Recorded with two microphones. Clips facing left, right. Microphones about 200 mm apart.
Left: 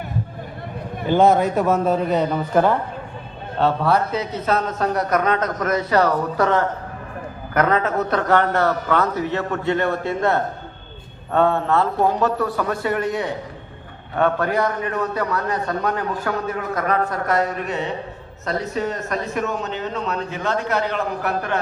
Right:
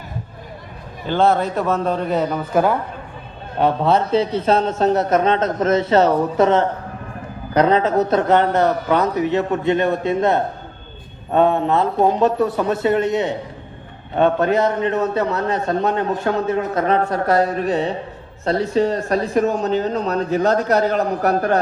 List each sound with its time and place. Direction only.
1.0 s a man's voice: 15° left (ahead or behind); by 2.7 s 5° right (ahead or behind)
3.6 s a man's voice: 20° right (ahead or behind); by 21.6 s 40° right (ahead or behind)